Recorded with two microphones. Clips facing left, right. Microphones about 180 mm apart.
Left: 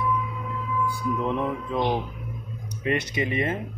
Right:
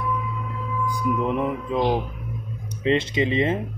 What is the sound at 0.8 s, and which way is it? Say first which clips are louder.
Speech: right 5 dB; 15° right (ahead or behind).